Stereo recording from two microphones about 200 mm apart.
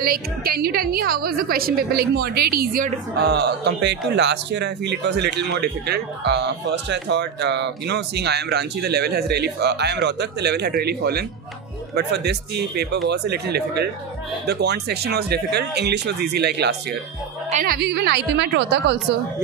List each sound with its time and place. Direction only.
0.0 s a woman's voice: 50° right (ahead or behind)
17.5 s a woman's voice: 40° right (ahead or behind)
17.7 s a woman's voice: 55° right (ahead or behind)